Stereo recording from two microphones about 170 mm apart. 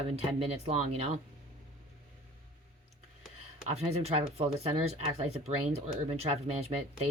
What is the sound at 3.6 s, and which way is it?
Speech, 40° right (ahead or behind).